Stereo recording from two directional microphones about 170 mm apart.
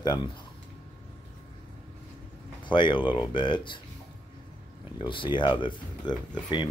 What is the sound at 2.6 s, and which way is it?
Speech, 30° left (ahead or behind).